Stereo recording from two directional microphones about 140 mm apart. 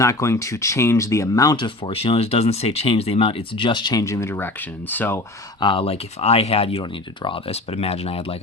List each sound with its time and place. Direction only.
0.0 s speech: 20° left (ahead or behind)
5.5 s speech: 35° left (ahead or behind)